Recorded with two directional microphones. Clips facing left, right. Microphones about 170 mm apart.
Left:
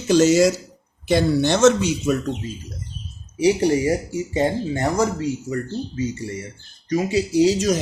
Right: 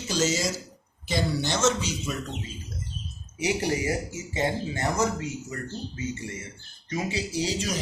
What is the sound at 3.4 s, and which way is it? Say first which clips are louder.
Speech: left 9 dB; 35° left (ahead or behind).